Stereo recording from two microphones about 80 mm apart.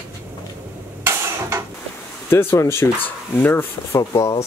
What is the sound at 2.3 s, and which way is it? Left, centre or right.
Speech, left.